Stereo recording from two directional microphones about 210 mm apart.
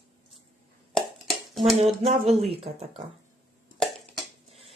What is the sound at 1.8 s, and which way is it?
Speech, 30° right (ahead or behind).